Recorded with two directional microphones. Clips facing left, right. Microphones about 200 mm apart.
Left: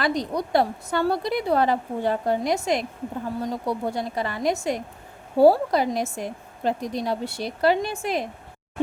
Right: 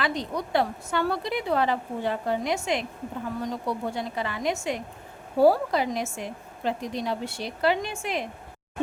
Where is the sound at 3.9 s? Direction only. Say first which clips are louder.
Left 3 dB; 40° left (ahead or behind).